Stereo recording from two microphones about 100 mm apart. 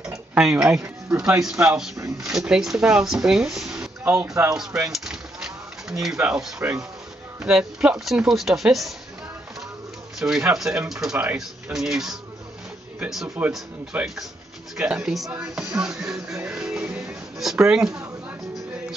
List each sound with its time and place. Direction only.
0.3 s speech: 5° right (ahead or behind)
4.0 s speech: 20° right (ahead or behind)
4.6 s bird: 5° right (ahead or behind)
6.6 s speech: 20° right (ahead or behind)
7.3 s speech: 5° right (ahead or behind)
10.1 s speech: 5° right (ahead or behind)
13.4 s speech: 15° right (ahead or behind)